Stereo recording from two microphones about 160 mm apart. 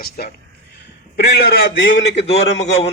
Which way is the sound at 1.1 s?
90° left.